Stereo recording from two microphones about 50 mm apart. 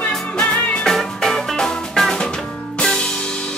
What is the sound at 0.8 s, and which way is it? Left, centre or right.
Music, centre.